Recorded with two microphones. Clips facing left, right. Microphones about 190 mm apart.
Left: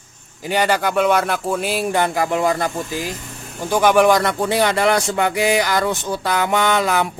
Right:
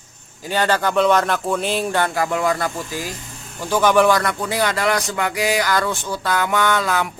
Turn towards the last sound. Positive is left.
turn(degrees=20)  # may be behind; listen again after turning